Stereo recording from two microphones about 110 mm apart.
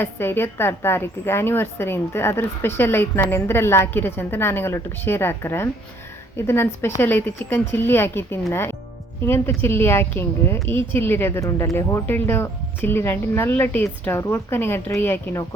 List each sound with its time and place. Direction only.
0.0 s a woman's voice: 20° left (ahead or behind)